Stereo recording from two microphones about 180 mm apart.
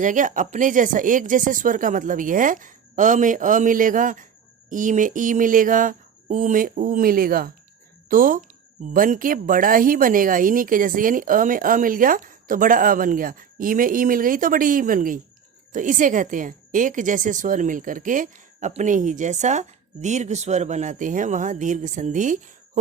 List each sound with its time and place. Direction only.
0.0 s speech: 45° right (ahead or behind)